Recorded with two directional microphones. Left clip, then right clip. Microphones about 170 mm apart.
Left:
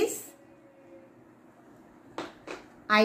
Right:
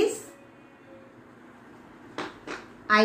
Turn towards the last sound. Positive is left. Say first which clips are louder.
# right 2 dB
turn(degrees=30)  # may be behind; listen again after turning